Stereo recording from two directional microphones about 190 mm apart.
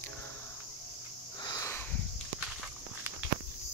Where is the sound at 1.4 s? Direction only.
15° left (ahead or behind).